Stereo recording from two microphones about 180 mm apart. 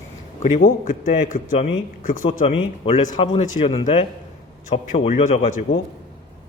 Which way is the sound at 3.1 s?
30° left (ahead or behind).